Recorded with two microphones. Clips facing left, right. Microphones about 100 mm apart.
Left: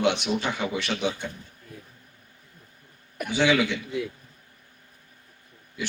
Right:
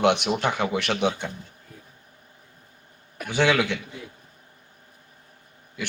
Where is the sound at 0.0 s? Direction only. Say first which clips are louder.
Right 3 dB; 55° right (ahead or behind).